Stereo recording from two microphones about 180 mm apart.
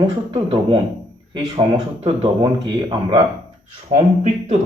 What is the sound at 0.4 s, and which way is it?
Speech, 30° right (ahead or behind).